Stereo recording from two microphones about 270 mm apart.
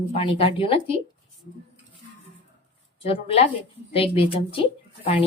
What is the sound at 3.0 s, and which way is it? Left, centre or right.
Speech, left.